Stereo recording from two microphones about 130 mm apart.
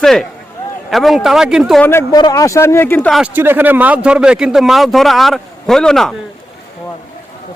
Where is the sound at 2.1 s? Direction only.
30° left (ahead or behind).